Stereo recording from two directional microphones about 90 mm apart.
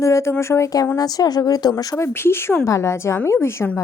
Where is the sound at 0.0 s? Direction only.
30° left (ahead or behind).